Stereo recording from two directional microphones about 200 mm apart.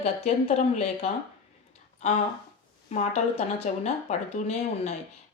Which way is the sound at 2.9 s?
35° left (ahead or behind).